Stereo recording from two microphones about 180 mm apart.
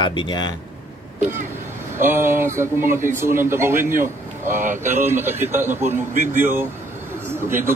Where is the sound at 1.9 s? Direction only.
15° right (ahead or behind).